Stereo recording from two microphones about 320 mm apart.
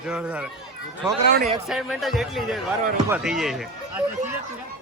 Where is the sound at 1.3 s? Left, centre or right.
Right.